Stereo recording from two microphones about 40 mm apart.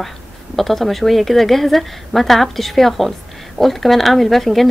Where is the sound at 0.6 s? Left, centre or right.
Centre.